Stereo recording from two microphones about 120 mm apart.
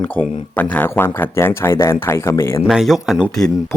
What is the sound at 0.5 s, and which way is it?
Speech, 15° left (ahead or behind).